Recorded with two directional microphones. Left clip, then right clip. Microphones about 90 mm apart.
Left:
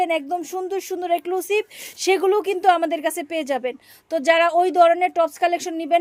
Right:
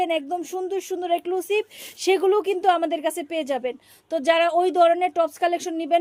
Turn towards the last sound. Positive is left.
turn(degrees=25)  # may be behind; listen again after turning